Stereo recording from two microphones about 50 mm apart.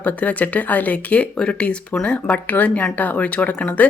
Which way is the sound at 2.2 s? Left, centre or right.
Left.